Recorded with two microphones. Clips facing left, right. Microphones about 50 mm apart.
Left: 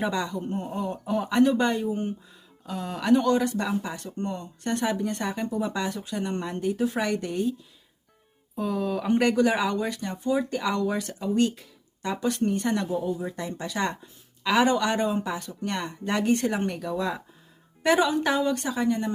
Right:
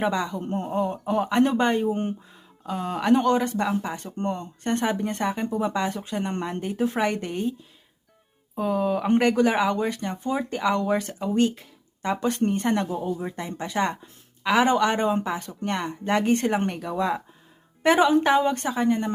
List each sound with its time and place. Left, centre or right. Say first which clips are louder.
0.0 s speech: right 2 dB; right
0.4 s speech: right 4 dB; right
2.3 s speech: right 4 dB; right
8.5 s speech: right 4 dB; right